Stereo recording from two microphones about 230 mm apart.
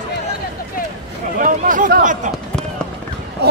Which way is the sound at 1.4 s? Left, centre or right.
Right.